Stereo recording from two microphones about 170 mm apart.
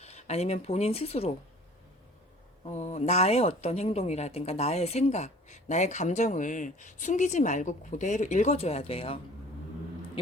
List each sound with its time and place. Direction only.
0.0 s speech: 40° left (ahead or behind)
2.6 s a woman's voice: 40° left (ahead or behind)